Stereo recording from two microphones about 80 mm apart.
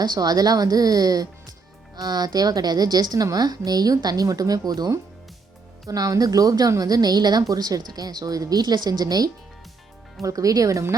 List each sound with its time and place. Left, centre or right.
0.0 s a woman's voice: right